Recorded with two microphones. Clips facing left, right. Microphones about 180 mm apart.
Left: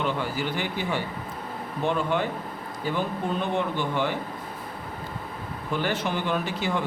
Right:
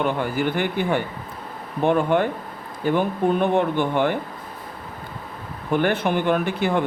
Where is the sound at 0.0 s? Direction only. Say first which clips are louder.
Right 5 dB; 55° right (ahead or behind).